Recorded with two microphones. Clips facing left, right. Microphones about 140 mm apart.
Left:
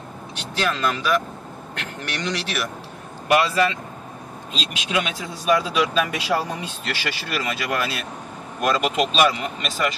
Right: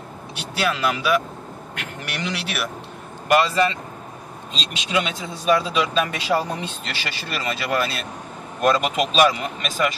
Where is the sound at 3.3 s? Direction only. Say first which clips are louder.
Right 1 dB; 5° left (ahead or behind).